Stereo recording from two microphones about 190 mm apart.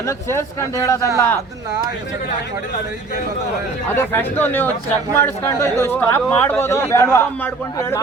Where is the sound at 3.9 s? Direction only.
10° left (ahead or behind).